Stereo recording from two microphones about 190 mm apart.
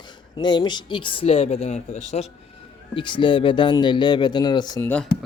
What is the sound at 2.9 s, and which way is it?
Speech, 25° left (ahead or behind).